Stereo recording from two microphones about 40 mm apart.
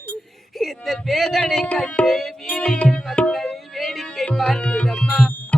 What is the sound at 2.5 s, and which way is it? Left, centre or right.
Music, centre.